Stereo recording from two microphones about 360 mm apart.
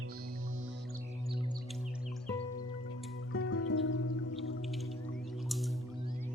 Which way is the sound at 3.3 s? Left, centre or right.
Left.